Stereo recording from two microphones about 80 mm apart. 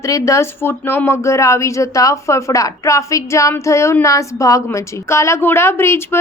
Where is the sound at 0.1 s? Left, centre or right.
Left.